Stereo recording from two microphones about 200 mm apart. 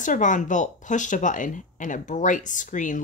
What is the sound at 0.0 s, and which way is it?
Speech, 40° left (ahead or behind).